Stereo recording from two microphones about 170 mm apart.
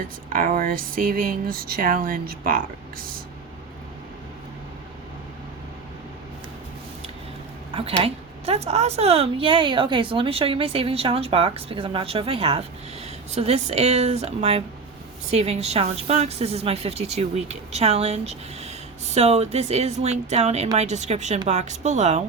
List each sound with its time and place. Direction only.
0.3 s speech: 55° right (ahead or behind)
7.7 s a woman's voice: 35° right (ahead or behind)